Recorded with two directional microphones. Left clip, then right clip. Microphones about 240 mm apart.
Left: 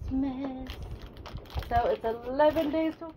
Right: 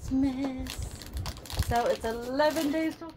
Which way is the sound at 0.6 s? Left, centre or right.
Right.